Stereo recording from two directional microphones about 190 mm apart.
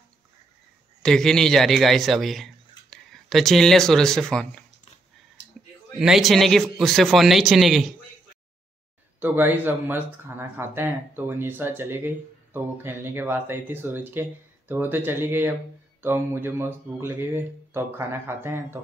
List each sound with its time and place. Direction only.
1.0 s speech: 5° left (ahead or behind)
5.9 s speech: centre (ahead or behind)
9.2 s speech: 10° right (ahead or behind)